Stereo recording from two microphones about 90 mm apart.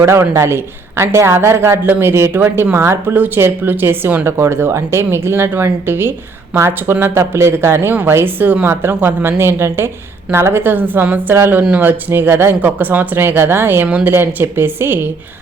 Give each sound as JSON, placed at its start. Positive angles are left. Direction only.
{"t": 0.0, "sound": "speech", "side_deg": -30}